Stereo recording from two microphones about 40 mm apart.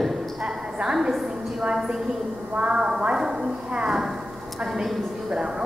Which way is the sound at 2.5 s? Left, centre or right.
Right.